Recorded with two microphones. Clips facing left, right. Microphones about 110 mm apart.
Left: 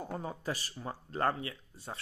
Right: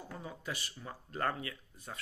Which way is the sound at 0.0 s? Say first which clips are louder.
Left 6 dB; 45° left (ahead or behind).